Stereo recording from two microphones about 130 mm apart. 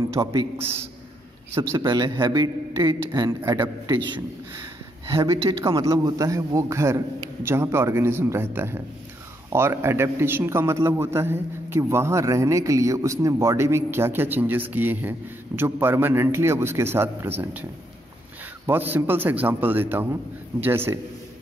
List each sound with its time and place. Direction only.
0.1 s a man's voice: 30° right (ahead or behind)
1.5 s a man's voice: 25° right (ahead or behind)
5.1 s a man's voice: 30° right (ahead or behind)
18.7 s speech: 15° right (ahead or behind)